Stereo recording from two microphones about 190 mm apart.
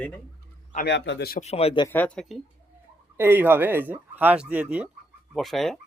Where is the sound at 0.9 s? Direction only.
65° left (ahead or behind).